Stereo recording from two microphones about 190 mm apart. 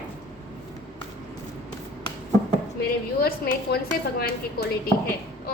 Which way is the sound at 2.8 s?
55° left (ahead or behind).